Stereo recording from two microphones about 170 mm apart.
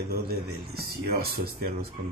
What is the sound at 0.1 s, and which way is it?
Speech, 65° right (ahead or behind).